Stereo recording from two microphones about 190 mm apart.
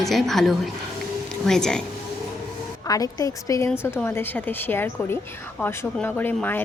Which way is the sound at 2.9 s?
20° left (ahead or behind).